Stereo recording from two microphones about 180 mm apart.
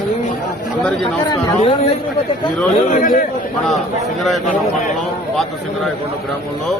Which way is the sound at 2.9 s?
50° left (ahead or behind).